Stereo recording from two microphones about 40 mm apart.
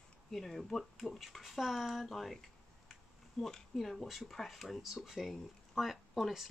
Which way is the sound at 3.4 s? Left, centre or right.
Centre.